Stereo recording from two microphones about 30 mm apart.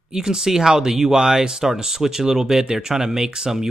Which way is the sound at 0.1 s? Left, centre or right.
Right.